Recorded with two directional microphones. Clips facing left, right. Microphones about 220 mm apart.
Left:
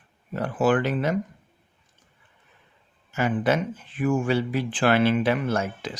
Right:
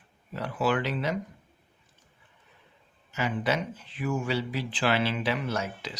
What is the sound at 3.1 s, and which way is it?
Speech, 50° left (ahead or behind).